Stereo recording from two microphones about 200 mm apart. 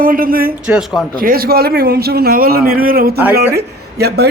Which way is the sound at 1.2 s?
45° right (ahead or behind).